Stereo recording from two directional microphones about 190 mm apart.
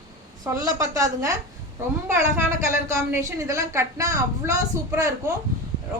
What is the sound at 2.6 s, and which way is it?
A woman's voice, 15° right (ahead or behind).